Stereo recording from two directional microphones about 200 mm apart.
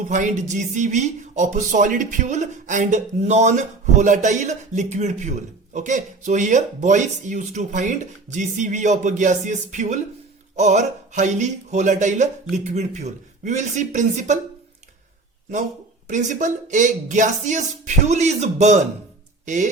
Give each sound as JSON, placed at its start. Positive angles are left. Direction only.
{"t": 0.1, "sound": "speech", "side_deg": -40}
{"t": 16.0, "sound": "speech", "side_deg": -40}